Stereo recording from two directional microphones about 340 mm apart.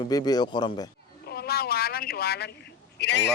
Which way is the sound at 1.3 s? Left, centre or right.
Left.